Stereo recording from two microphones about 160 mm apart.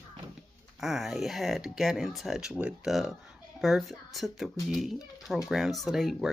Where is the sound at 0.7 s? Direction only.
Centre (ahead or behind).